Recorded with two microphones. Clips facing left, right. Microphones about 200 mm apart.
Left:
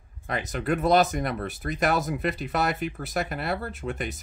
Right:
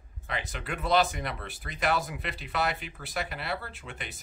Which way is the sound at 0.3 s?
45° left (ahead or behind).